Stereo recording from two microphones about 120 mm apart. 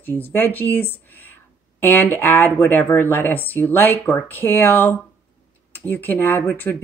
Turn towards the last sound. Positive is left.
turn(degrees=15)  # may be behind; listen again after turning